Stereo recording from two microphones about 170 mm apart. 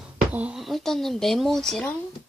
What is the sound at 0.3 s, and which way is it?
Speech, 5° right (ahead or behind).